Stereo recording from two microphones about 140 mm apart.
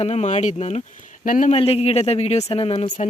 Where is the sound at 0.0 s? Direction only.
50° left (ahead or behind).